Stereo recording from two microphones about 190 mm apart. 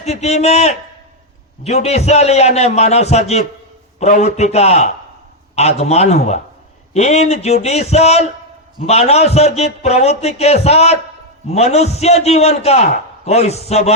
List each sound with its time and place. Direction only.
0.0 s a man's voice: 35° left (ahead or behind)